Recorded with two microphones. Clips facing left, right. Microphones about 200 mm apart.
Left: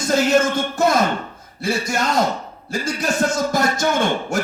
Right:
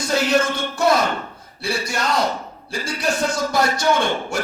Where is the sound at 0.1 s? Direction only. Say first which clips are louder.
Left 3 dB; 45° left (ahead or behind).